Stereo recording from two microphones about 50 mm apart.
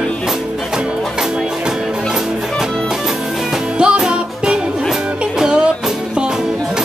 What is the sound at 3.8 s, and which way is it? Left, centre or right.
Music, centre.